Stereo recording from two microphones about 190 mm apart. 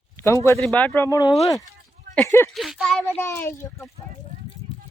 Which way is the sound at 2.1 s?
15° left (ahead or behind).